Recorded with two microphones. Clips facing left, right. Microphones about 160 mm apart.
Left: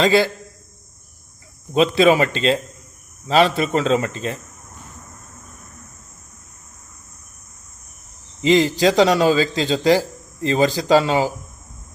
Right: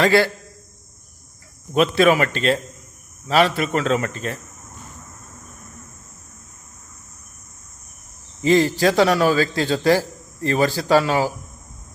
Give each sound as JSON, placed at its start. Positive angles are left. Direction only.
{"t": 0.0, "sound": "speech", "side_deg": 15}
{"t": 1.7, "sound": "a man's voice", "side_deg": 25}
{"t": 8.4, "sound": "a man's voice", "side_deg": 15}